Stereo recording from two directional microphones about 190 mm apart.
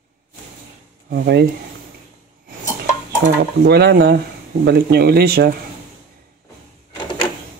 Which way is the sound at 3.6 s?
60° right (ahead or behind).